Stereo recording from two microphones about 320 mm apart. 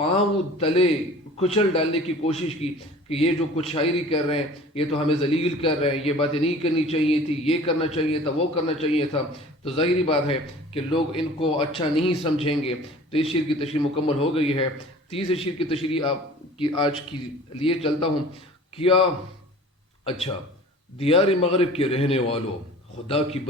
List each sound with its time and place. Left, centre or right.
0.6 s a man's voice: centre
20.1 s speech: centre